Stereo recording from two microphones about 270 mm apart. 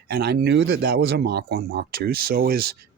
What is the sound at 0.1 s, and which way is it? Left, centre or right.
Speech, right.